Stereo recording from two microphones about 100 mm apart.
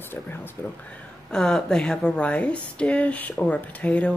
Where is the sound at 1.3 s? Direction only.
5° left (ahead or behind).